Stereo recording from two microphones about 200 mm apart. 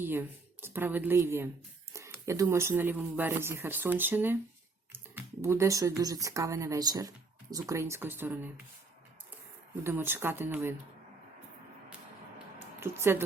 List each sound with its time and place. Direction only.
0.0 s speech: 10° right (ahead or behind)
9.8 s speech: 10° right (ahead or behind)
12.5 s a sound: 10° right (ahead or behind)